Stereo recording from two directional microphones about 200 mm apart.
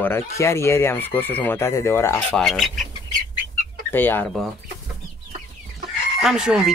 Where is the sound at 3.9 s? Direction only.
10° left (ahead or behind).